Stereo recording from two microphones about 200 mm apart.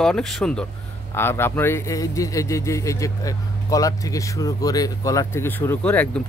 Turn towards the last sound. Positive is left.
turn(degrees=10)  # may be behind; listen again after turning